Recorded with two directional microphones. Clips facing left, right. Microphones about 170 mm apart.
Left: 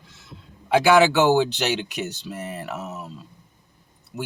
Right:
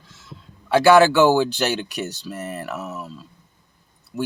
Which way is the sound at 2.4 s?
60° right (ahead or behind).